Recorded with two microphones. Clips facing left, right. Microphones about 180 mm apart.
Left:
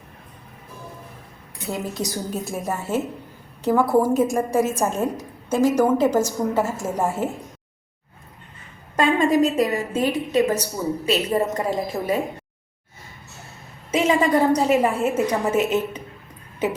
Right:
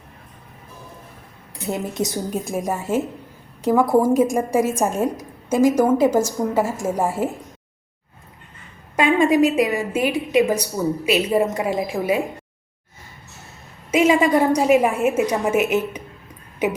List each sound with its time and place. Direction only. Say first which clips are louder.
1.6 s a woman's voice: right 3 dB; 25° right (ahead or behind)
9.0 s a woman's voice: right 2 dB; 10° right (ahead or behind)
13.9 s a woman's voice: right 3 dB; 10° right (ahead or behind)